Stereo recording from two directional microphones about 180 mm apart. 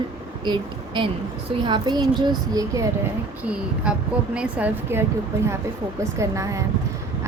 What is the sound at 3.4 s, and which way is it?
A woman's voice, 5° right (ahead or behind).